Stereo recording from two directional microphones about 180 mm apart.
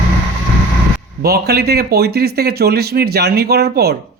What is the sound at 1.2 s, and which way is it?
Speech, 60° right (ahead or behind).